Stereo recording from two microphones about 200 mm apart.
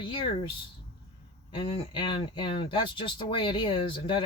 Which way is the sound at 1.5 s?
25° left (ahead or behind).